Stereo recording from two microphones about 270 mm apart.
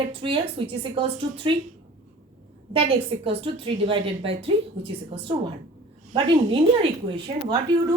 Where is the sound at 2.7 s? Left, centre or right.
Centre.